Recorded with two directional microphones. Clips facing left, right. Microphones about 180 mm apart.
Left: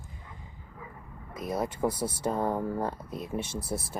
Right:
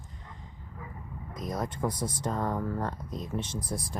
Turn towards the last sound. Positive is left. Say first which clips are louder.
# left 1 dB
turn(degrees=5)  # may be behind; listen again after turning